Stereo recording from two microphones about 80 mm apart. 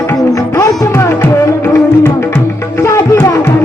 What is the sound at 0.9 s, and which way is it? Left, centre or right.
Music, left.